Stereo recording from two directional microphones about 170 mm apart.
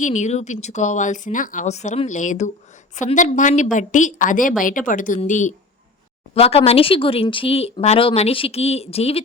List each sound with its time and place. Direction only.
0.0 s a woman's voice: 45° left (ahead or behind)
6.3 s speech: 35° left (ahead or behind)